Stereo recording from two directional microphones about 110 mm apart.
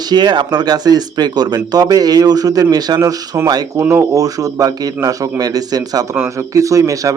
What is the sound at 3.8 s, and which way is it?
A man's voice, 25° right (ahead or behind).